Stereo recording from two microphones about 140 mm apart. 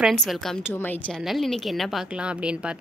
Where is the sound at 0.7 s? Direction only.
15° left (ahead or behind).